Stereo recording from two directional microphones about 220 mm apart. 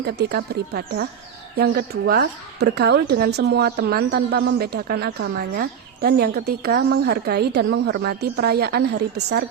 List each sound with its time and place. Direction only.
0.0 s speech: 50° right (ahead or behind)
1.5 s speech: 45° right (ahead or behind)